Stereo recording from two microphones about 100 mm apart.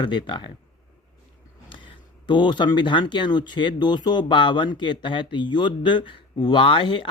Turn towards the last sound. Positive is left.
turn(degrees=55)  # may be behind; listen again after turning